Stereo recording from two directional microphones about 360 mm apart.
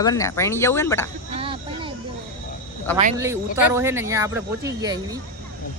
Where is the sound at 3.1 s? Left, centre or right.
Centre.